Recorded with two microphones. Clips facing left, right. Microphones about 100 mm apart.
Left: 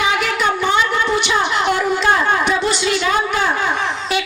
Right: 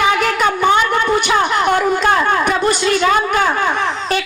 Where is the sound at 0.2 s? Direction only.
50° right (ahead or behind).